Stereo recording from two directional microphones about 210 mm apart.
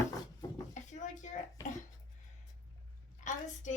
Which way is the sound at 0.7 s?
35° left (ahead or behind).